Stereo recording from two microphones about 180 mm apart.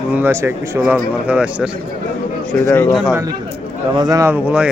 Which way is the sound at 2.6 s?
10° left (ahead or behind).